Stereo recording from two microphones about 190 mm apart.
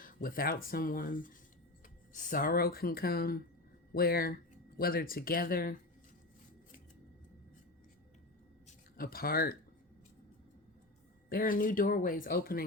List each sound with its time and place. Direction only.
0.0 s speech: 50° left (ahead or behind)
9.0 s speech: 50° left (ahead or behind)
11.3 s speech: 50° left (ahead or behind)